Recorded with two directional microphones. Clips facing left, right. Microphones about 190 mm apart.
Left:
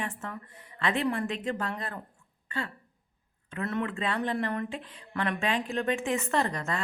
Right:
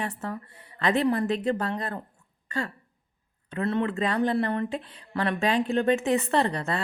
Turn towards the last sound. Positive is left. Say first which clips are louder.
# right 4 dB
turn(degrees=-35)  # may be behind; listen again after turning